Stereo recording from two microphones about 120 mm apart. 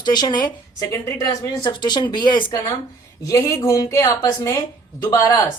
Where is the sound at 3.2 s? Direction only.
25° left (ahead or behind).